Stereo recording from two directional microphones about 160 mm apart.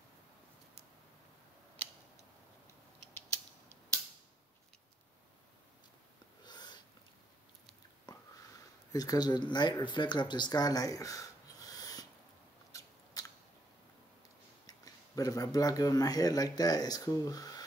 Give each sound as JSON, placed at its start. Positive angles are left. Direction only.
{"t": 6.4, "sound": "a sound", "side_deg": 25}
{"t": 8.9, "sound": "speech", "side_deg": 25}
{"t": 12.7, "sound": "scissors", "side_deg": 20}
{"t": 14.7, "sound": "speech", "side_deg": 20}